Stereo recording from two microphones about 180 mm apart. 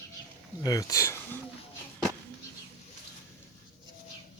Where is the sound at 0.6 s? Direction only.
20° left (ahead or behind).